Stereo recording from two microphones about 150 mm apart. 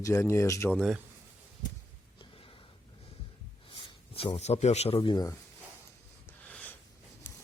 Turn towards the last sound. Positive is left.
turn(degrees=10)  # may be behind; listen again after turning